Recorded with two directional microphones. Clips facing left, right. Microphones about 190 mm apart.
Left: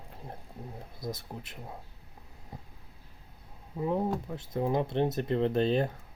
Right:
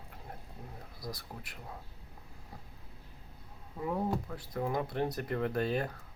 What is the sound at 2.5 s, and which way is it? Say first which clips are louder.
Vehicle: left 5 dB; 20° left (ahead or behind).